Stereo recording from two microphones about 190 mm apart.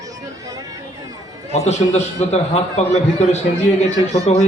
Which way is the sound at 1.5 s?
35° left (ahead or behind).